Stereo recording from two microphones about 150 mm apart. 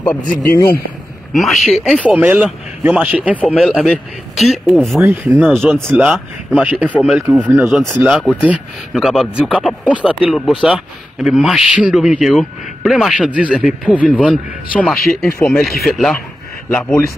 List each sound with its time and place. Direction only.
0.4 s speech: 15° left (ahead or behind)
1.3 s a man's voice: centre (ahead or behind)
2.0 s a man's voice: 10° right (ahead or behind)
7.6 s a man's voice: 5° left (ahead or behind)
14.3 s a man's voice: 5° left (ahead or behind)
16.6 s speech: 15° left (ahead or behind)